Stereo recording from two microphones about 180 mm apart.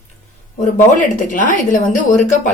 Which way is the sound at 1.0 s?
45° left (ahead or behind).